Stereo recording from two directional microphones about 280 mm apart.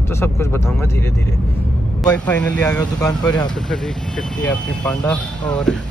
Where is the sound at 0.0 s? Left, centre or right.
Centre.